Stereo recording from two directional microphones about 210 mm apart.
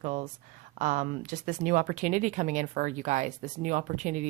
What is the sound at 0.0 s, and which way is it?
A woman's voice, 35° right (ahead or behind).